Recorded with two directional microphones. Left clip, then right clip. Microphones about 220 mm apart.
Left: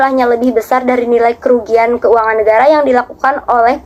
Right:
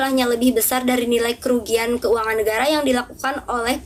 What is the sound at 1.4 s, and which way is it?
A woman's voice, 40° right (ahead or behind).